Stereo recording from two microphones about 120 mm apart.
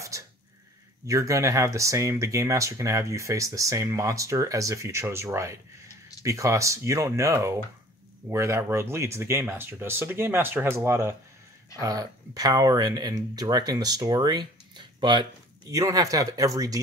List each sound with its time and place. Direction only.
1.0 s speech: 25° right (ahead or behind)
11.8 s speech: 30° right (ahead or behind)
15.7 s speech: 30° right (ahead or behind)